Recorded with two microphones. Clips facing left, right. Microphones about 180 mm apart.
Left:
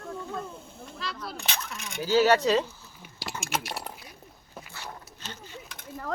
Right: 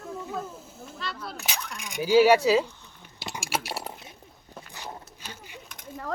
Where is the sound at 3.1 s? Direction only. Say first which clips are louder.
Even; 20° right (ahead or behind).